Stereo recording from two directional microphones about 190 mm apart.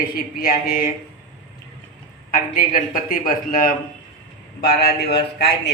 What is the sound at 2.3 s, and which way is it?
A man's voice, 45° left (ahead or behind).